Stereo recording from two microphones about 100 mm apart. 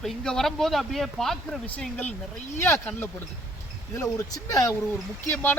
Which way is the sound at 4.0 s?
35° left (ahead or behind).